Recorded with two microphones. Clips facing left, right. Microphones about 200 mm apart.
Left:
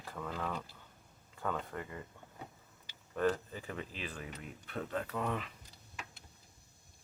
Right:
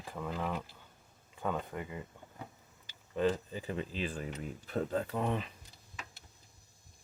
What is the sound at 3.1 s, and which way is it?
Speech, 15° right (ahead or behind).